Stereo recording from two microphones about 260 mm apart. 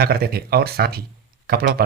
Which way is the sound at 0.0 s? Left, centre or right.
Right.